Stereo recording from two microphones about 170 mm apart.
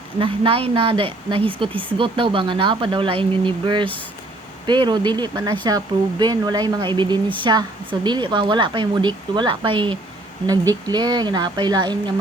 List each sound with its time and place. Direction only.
0.2 s speech: 30° right (ahead or behind)